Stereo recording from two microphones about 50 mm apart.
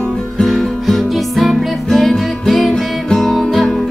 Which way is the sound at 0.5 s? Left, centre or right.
Centre.